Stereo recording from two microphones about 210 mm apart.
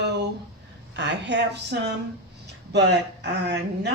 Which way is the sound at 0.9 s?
55° right (ahead or behind).